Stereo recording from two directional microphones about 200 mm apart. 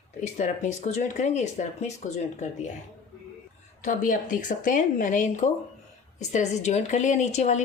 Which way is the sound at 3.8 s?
40° left (ahead or behind).